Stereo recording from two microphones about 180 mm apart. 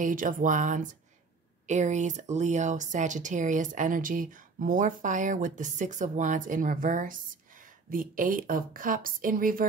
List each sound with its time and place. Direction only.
0.0 s speech: 50° right (ahead or behind)